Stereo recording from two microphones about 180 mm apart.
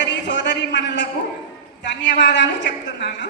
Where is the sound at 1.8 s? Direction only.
75° left (ahead or behind).